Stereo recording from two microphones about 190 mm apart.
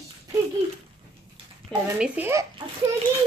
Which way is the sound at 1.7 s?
5° left (ahead or behind).